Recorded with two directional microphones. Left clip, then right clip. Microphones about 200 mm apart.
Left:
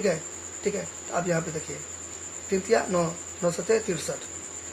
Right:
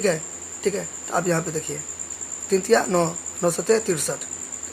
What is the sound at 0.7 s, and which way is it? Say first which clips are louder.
Speech: right 4 dB; 35° right (ahead or behind).